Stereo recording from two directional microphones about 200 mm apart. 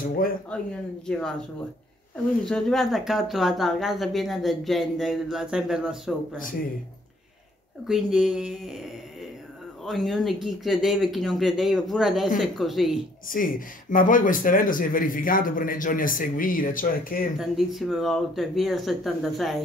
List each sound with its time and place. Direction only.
1.0 s speech: 5° left (ahead or behind)
2.4 s speech: centre (ahead or behind)
7.8 s speech: 5° right (ahead or behind)
13.3 s speech: 45° left (ahead or behind)
17.4 s speech: centre (ahead or behind)